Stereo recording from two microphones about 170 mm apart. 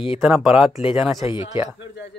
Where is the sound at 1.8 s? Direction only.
90° left.